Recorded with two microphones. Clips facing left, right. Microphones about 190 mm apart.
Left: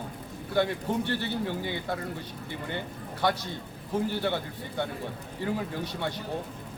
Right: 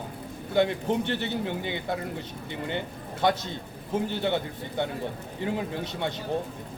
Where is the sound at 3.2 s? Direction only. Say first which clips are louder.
Right 3 dB; 20° right (ahead or behind).